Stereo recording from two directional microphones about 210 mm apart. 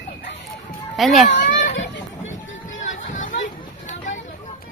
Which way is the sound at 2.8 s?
35° left (ahead or behind).